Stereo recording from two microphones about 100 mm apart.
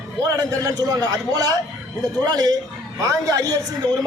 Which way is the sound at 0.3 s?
35° right (ahead or behind).